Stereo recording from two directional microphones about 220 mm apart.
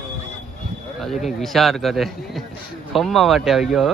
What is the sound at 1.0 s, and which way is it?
A man's voice, centre (ahead or behind).